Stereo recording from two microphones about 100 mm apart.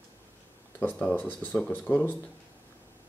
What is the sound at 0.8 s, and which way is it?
Speech, 15° left (ahead or behind).